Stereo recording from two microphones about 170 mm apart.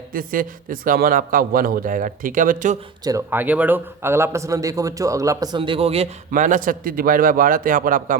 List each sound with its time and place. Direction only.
0.1 s a man's voice: 55° right (ahead or behind)
3.0 s a man's voice: 20° right (ahead or behind); by 8.2 s 55° right (ahead or behind)